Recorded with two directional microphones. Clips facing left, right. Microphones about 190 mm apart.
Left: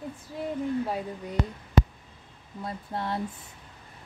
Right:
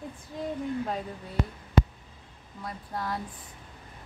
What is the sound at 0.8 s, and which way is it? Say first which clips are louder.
Speech: left 2 dB; 10° left (ahead or behind).